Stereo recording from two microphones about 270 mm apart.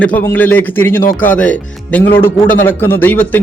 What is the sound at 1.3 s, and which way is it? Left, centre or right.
Speech, centre.